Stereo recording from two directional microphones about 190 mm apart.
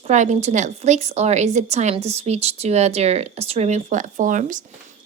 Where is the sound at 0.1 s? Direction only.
40° right (ahead or behind).